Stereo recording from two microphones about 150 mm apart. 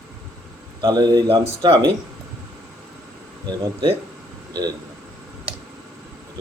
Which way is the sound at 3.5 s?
35° right (ahead or behind).